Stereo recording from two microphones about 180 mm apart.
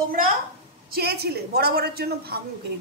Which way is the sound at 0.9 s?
60° right (ahead or behind).